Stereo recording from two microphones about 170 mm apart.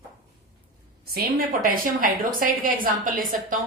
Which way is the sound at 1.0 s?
60° right (ahead or behind).